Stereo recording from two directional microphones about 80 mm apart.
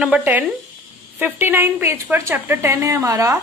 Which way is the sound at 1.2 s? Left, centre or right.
Right.